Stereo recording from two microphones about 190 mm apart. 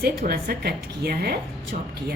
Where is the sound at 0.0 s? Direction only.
55° right (ahead or behind).